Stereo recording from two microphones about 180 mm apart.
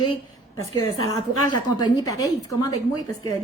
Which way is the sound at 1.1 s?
20° left (ahead or behind).